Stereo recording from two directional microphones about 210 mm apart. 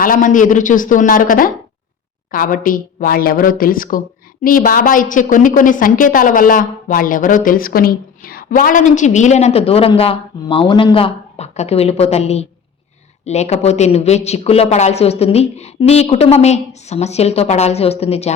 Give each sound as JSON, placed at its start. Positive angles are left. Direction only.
{"t": 0.0, "sound": "a woman's voice", "side_deg": 40}